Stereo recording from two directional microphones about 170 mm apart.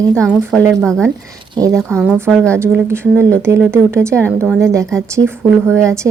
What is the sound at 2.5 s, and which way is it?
Speech, 15° right (ahead or behind).